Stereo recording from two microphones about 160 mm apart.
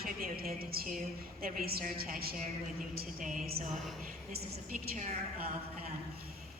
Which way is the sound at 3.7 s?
Centre (ahead or behind).